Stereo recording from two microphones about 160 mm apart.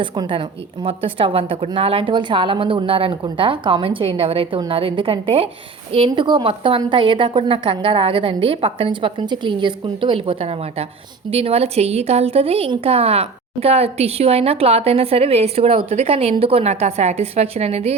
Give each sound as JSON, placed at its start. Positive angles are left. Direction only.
{"t": 0.0, "sound": "a woman's voice", "side_deg": -30}